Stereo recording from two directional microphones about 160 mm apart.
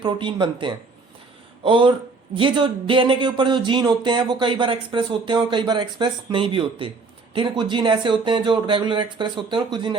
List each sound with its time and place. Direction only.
0.0 s speech: 30° right (ahead or behind)